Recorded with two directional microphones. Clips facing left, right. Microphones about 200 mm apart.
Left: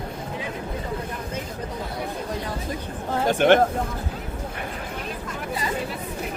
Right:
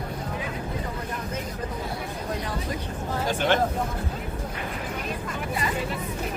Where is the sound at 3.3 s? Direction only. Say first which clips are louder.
Left 7 dB; 55° left (ahead or behind).